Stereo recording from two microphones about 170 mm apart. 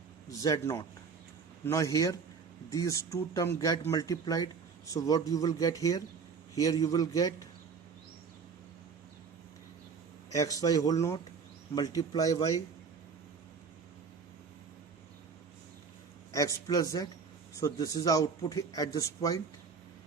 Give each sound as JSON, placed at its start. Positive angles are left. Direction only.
{"t": 0.3, "sound": "a man's voice", "side_deg": 20}
{"t": 10.2, "sound": "a man's voice", "side_deg": 20}
{"t": 16.3, "sound": "a man's voice", "side_deg": 20}